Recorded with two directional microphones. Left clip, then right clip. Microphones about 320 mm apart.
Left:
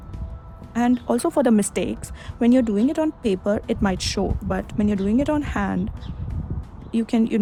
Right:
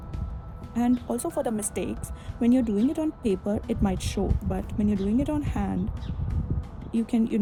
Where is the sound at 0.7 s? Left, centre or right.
Left.